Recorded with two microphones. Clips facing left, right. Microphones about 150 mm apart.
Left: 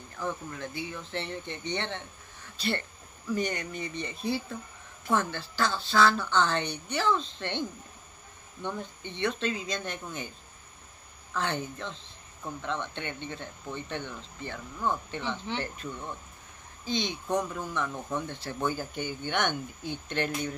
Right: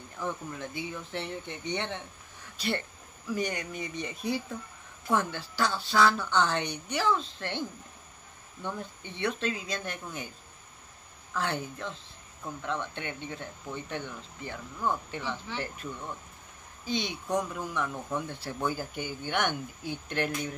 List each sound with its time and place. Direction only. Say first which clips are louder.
0.2 s speech: left 1 dB; 15° right (ahead or behind)
8.6 s speech: left 1 dB; 5° right (ahead or behind)
11.3 s speech: left 1 dB; 5° right (ahead or behind)
15.5 s speech: left 4 dB; 20° left (ahead or behind)
16.8 s speech: left 1 dB; 10° right (ahead or behind)